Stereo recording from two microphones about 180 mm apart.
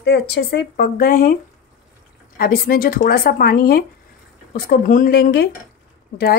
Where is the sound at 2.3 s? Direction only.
55° left (ahead or behind).